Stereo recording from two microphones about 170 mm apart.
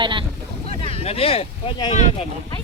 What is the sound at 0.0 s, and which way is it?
Boat, 30° right (ahead or behind).